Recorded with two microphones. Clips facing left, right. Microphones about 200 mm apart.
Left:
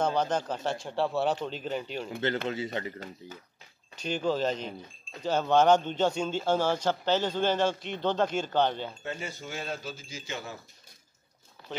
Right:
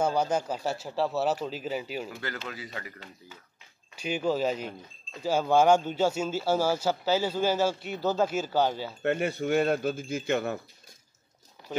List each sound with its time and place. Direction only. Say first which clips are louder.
0.0 s speech: right 1 dB; 10° right (ahead or behind)
2.0 s a man's voice: left 7 dB; 25° left (ahead or behind)
3.9 s speech: right 1 dB; 10° right (ahead or behind)
9.0 s speech: right 10 dB; 65° right (ahead or behind)